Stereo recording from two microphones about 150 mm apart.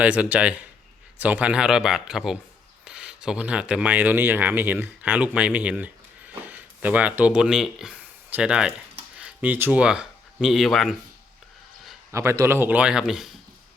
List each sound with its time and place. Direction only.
0.0 s a man's voice: 10° right (ahead or behind)
12.1 s a man's voice: 20° right (ahead or behind); by 13.3 s 5° right (ahead or behind)